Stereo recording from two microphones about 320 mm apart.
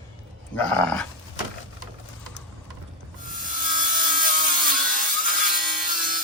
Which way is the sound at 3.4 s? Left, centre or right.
Right.